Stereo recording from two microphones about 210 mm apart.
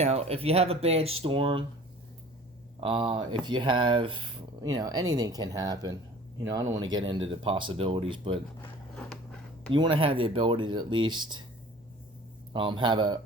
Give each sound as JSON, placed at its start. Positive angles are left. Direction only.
{"t": 0.0, "sound": "speech", "side_deg": -30}
{"t": 2.8, "sound": "speech", "side_deg": -25}
{"t": 9.0, "sound": "a sound", "side_deg": 5}
{"t": 9.7, "sound": "speech", "side_deg": -25}
{"t": 12.5, "sound": "speech", "side_deg": -20}